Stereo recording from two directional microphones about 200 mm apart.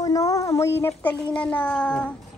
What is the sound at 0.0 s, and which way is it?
A woman's voice, 15° left (ahead or behind).